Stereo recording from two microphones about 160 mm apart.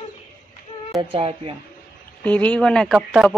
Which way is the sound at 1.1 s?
35° right (ahead or behind).